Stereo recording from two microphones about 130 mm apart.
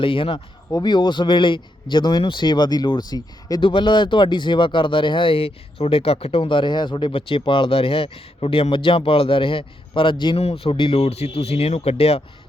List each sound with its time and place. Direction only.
0.0 s speech: 40° left (ahead or behind)
10.4 s speech: 50° left (ahead or behind)